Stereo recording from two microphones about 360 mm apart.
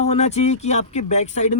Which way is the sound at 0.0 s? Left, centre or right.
Centre.